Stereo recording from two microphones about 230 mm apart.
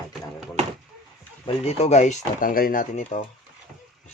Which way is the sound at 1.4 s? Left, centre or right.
Left.